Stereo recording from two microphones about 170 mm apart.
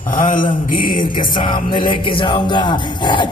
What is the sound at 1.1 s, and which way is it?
Music, 30° left (ahead or behind).